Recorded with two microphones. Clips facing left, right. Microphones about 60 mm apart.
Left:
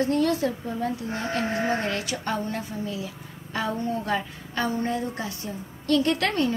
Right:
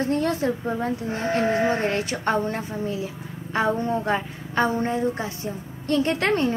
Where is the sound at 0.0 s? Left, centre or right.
Right.